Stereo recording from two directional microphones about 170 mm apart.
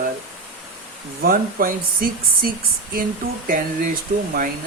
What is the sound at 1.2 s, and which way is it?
Speech, 55° right (ahead or behind).